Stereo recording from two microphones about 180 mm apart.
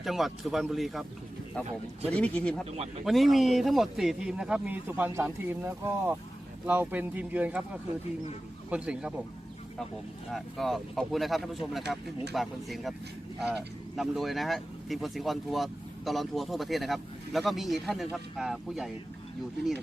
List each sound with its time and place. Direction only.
0.0 s speech: centre (ahead or behind)
2.6 s speech: 35° right (ahead or behind)
3.0 s speech: centre (ahead or behind)
10.3 s speech: centre (ahead or behind)